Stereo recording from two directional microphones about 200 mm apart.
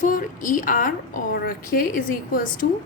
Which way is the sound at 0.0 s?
40° left (ahead or behind).